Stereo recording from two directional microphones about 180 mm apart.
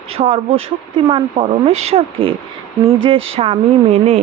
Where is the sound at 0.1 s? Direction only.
35° right (ahead or behind).